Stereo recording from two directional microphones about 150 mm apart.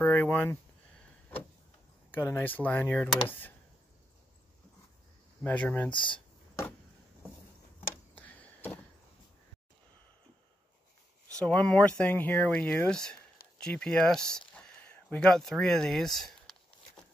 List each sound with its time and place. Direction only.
0.0 s speech: 10° left (ahead or behind)
2.1 s speech: 15° left (ahead or behind)
5.4 s speech: 10° left (ahead or behind)
5.9 s speech: 35° left (ahead or behind)
8.2 s a sound: 10° left (ahead or behind)
11.3 s speech: 10° left (ahead or behind)
14.5 s a sound: 5° left (ahead or behind)